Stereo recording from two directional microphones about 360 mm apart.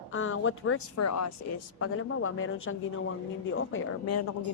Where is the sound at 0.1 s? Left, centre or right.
Left.